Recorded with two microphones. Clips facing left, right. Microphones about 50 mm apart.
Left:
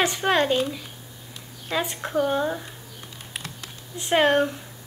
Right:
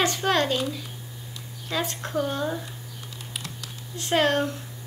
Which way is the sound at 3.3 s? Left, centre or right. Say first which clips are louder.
Left 1 dB; left.